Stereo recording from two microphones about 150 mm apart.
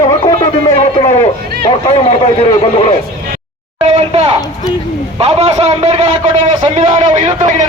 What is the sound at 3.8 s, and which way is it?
A man's voice, 40° right (ahead or behind).